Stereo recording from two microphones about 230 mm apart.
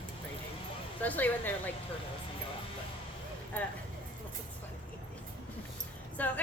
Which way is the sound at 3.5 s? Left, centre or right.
Centre.